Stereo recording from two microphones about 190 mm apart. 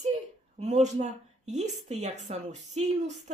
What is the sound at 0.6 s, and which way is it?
A woman's voice, 35° right (ahead or behind).